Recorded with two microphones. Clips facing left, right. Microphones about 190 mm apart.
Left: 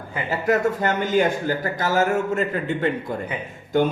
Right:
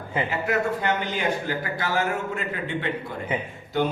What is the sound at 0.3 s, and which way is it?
A man's voice, 40° left (ahead or behind).